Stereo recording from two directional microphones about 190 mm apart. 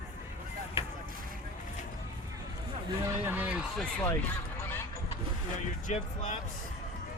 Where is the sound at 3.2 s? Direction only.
10° right (ahead or behind).